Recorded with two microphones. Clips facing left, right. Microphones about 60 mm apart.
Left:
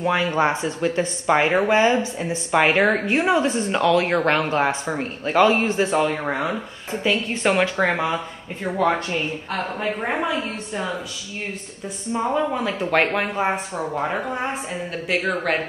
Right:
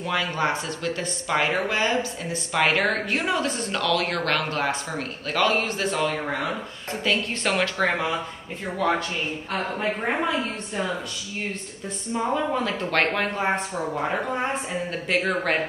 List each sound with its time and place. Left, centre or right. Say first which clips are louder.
0.0 s speech: left 5 dB; left
9.5 s speech: right 1 dB; centre
12.1 s speech: left 3 dB; centre